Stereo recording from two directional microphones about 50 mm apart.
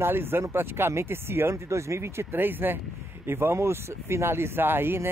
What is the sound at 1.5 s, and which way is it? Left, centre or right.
Speech, right.